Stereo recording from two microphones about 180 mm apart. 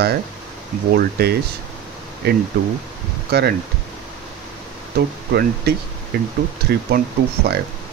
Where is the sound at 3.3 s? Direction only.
65° right (ahead or behind).